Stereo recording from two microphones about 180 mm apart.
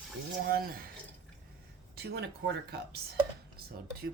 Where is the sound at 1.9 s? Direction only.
65° right (ahead or behind).